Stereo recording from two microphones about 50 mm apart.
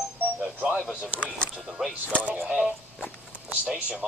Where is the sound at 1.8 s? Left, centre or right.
Centre.